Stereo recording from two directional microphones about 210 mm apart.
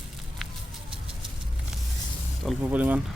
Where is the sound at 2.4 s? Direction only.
5° right (ahead or behind).